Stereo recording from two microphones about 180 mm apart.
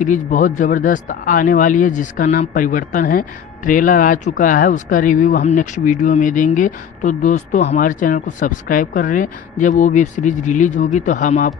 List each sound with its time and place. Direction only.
0.0 s speech: 45° left (ahead or behind)